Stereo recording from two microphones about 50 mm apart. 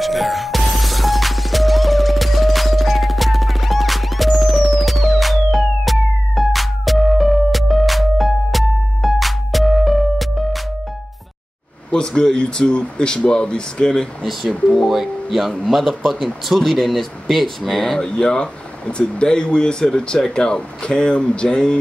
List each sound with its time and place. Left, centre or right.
0.0 s music: centre
11.9 s speech: centre
14.8 s speech: centre